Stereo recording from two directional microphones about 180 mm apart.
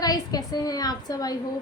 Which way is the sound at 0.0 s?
20° left (ahead or behind).